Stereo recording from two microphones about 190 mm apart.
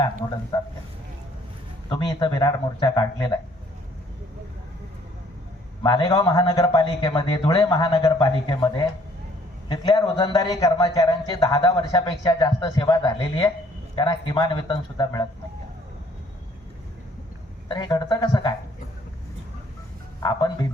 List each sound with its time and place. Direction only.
0.5 s a man's voice: 20° left (ahead or behind)
1.9 s a man's voice: 25° left (ahead or behind)
5.8 s a man's voice: 25° left (ahead or behind)
17.7 s a man's voice: 25° left (ahead or behind)
20.2 s a man's voice: 20° left (ahead or behind)